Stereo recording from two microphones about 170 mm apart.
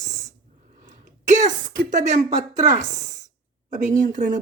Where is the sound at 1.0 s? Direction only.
45° right (ahead or behind).